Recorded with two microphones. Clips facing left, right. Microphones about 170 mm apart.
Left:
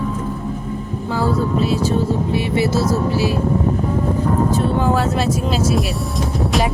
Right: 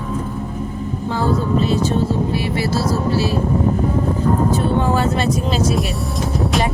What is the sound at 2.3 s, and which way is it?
Speech, 20° left (ahead or behind).